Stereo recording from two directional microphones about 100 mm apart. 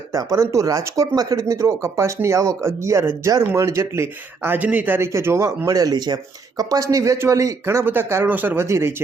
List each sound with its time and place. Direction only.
0.1 s speech: 35° right (ahead or behind)